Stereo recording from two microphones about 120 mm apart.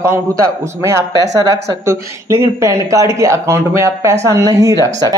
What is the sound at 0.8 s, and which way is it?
Speech, 25° right (ahead or behind).